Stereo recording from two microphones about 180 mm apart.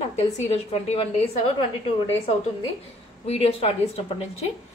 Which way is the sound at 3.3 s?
35° left (ahead or behind).